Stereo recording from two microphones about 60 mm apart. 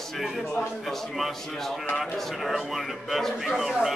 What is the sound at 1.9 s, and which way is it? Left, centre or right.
Speech, centre.